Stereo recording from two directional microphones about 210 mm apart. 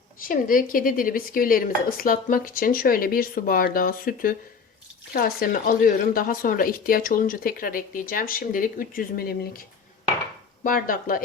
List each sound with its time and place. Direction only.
0.2 s a woman's voice: 40° left (ahead or behind)
10.6 s speech: 40° left (ahead or behind)